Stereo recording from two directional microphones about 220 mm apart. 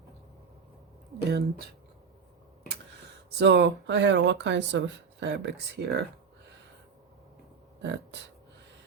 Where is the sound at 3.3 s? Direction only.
50° right (ahead or behind).